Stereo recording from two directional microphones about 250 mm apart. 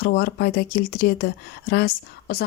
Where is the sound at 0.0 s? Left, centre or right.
Left.